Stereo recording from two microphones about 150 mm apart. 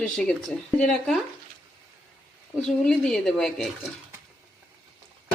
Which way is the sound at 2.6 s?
5° left (ahead or behind).